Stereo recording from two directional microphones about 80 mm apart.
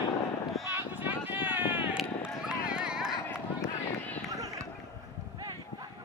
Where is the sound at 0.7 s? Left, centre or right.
Right.